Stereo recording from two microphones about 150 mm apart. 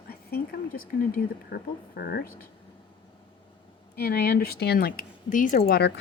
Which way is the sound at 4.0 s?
90° left.